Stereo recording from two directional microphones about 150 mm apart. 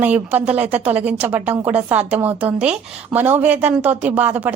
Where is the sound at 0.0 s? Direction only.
10° right (ahead or behind).